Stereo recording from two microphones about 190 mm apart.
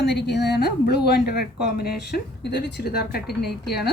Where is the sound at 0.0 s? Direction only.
65° left (ahead or behind).